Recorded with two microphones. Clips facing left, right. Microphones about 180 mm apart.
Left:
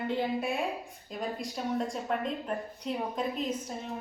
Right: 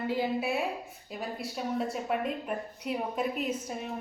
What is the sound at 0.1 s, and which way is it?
Speech, 5° right (ahead or behind).